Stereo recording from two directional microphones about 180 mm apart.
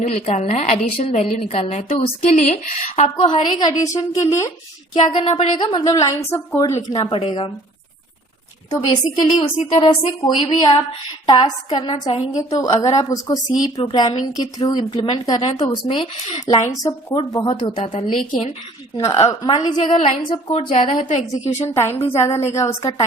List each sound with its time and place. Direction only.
0.0 s speech: 40° left (ahead or behind)
3.0 s a woman's voice: 30° left (ahead or behind)
5.2 s speech: 35° left (ahead or behind)
5.5 s a woman's voice: 20° left (ahead or behind)
7.0 s a woman's voice: 30° left (ahead or behind)
9.1 s a woman's voice: 25° left (ahead or behind)
18.9 s a woman's voice: 20° left (ahead or behind)
21.7 s a woman's voice: 15° left (ahead or behind)